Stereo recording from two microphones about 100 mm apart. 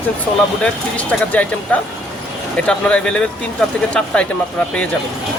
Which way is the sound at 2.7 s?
10° left (ahead or behind).